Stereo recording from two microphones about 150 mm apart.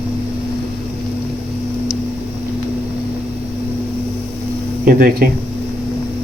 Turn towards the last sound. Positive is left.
turn(degrees=-80)